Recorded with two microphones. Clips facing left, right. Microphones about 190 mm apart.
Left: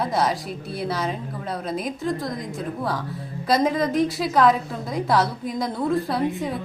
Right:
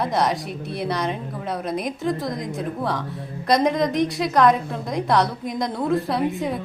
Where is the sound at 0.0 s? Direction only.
Centre (ahead or behind).